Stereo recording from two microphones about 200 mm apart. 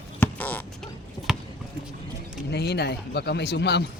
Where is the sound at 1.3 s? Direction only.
5° right (ahead or behind).